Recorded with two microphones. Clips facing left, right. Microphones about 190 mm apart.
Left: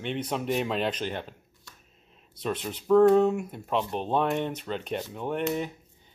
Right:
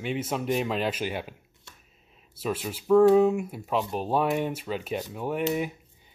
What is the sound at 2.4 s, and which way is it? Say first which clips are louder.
Speech: right 1 dB; 5° right (ahead or behind).